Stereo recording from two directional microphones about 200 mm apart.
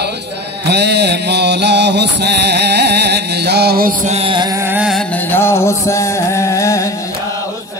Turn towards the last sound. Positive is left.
turn(degrees=15)  # may be behind; listen again after turning